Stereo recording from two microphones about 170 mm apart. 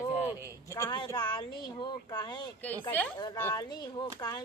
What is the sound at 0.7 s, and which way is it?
Speech, 20° left (ahead or behind).